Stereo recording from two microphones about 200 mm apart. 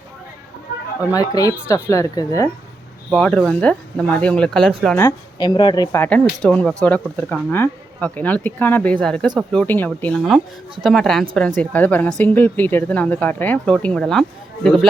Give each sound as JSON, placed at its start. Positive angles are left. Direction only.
{"t": 1.1, "sound": "speech", "side_deg": 20}
{"t": 4.9, "sound": "speech", "side_deg": 20}